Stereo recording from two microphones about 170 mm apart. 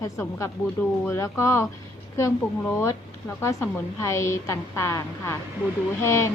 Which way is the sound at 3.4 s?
15° left (ahead or behind).